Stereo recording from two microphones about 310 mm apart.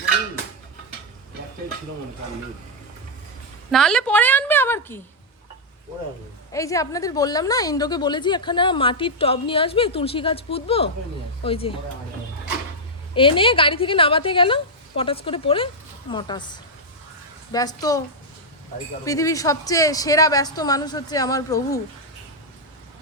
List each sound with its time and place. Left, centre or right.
3.7 s a woman's voice: centre
6.5 s a woman's voice: centre
13.1 s a woman's voice: centre
17.5 s a woman's voice: centre
19.0 s a woman's voice: centre